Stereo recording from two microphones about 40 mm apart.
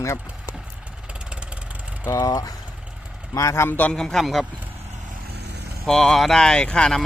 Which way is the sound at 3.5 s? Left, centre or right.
Left.